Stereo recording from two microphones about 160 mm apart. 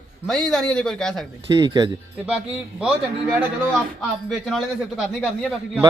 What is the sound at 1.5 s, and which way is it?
Speech, 25° right (ahead or behind).